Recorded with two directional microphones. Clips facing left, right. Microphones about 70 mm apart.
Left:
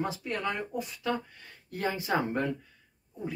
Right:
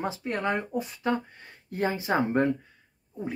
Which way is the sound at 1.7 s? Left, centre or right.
Right.